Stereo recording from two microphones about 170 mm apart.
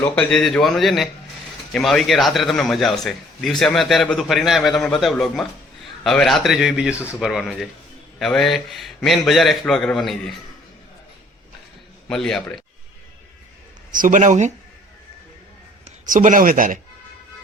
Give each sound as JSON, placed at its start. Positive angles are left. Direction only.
{"t": 0.0, "sound": "a man's voice", "side_deg": 5}
{"t": 12.0, "sound": "a man's voice", "side_deg": 5}
{"t": 13.9, "sound": "speech", "side_deg": -50}
{"t": 16.0, "sound": "speech", "side_deg": -50}